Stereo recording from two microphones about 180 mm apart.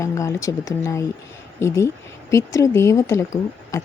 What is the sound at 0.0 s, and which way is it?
A woman's voice, 15° left (ahead or behind).